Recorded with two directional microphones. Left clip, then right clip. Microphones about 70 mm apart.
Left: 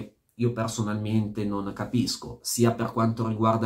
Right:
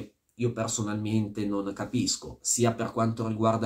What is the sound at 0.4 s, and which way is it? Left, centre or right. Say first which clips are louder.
Speech: left 2 dB; right.